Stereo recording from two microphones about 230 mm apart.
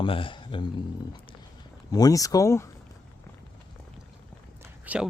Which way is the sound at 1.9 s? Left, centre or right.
Centre.